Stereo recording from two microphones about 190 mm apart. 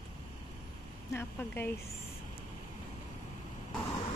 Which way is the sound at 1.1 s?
10° left (ahead or behind).